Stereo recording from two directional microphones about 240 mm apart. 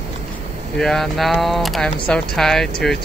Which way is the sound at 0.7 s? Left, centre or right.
Centre.